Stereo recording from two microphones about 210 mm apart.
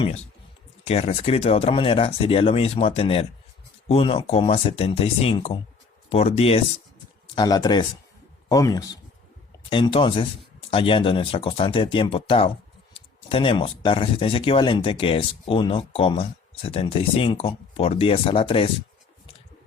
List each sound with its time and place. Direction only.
0.9 s speech: 30° left (ahead or behind)